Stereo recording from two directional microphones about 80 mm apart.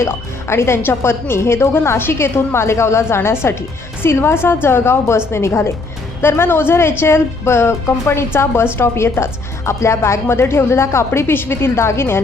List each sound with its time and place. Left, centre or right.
0.0 s a woman's voice: left